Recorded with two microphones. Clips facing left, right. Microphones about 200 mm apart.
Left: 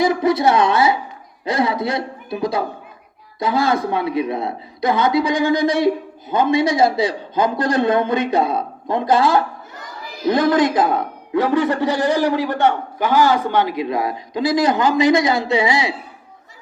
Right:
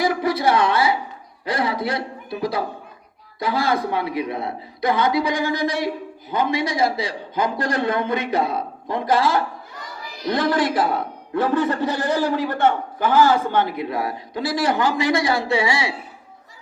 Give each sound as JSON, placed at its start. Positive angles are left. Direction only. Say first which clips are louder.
{"t": 0.0, "sound": "a man's voice", "louder": "left 4 dB", "side_deg": 25}